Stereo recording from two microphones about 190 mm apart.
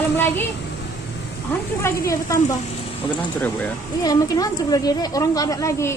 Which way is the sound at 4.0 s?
20° left (ahead or behind).